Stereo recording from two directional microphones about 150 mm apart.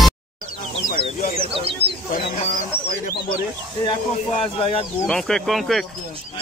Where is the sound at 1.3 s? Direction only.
40° right (ahead or behind).